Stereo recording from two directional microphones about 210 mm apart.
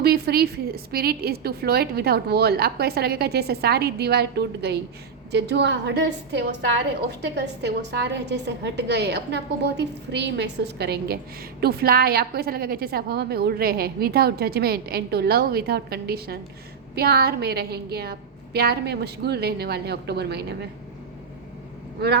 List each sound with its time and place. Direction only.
0.0 s a woman's voice: 50° right (ahead or behind)